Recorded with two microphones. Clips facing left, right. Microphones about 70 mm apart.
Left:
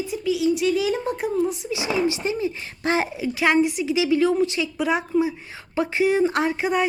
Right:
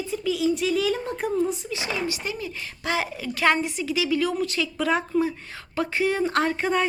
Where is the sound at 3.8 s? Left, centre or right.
Left.